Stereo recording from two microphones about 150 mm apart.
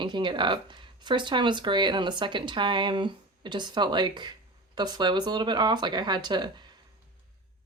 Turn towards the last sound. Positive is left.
turn(degrees=-30)  # may be behind; listen again after turning